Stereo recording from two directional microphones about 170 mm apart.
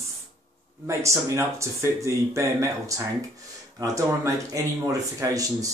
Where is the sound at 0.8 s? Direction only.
15° right (ahead or behind).